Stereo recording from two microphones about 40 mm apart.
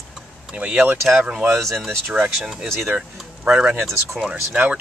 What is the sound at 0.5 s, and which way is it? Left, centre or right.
Speech, right.